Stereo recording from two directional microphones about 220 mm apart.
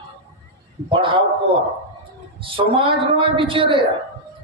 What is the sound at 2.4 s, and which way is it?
A woman's voice, 25° right (ahead or behind).